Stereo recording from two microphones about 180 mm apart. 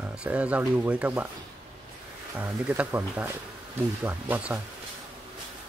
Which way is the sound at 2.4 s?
10° right (ahead or behind).